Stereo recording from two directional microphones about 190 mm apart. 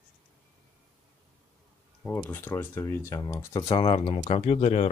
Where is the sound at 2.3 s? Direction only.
10° left (ahead or behind).